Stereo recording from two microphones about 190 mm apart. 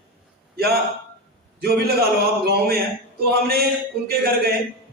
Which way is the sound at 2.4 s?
55° right (ahead or behind).